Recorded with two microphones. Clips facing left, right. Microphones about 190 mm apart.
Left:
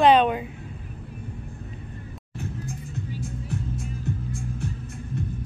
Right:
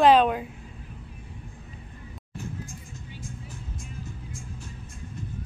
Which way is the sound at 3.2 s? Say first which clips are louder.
Left 8 dB; 65° left (ahead or behind).